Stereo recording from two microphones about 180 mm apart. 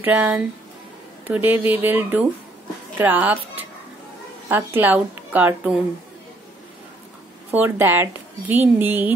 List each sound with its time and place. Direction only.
0.0 s a woman's voice: 10° right (ahead or behind)
7.5 s a woman's voice: 10° right (ahead or behind)